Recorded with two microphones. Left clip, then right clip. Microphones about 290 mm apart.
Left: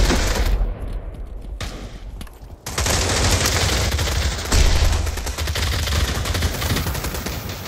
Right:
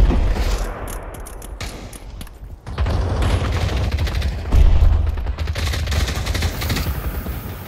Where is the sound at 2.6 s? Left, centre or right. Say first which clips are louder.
Left 6 dB; left.